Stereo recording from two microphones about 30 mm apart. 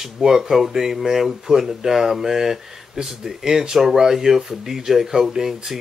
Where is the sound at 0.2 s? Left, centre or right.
Centre.